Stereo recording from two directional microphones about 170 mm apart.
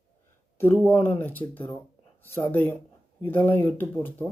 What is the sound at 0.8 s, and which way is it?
Speech, 15° left (ahead or behind).